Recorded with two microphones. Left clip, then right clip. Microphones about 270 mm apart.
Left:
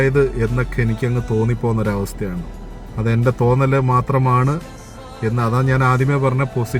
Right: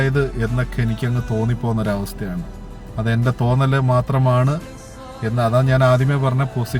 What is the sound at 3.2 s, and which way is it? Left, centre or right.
A man's voice, centre.